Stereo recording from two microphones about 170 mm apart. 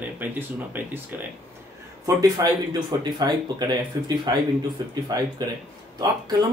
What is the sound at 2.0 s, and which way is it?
Speech, 20° right (ahead or behind).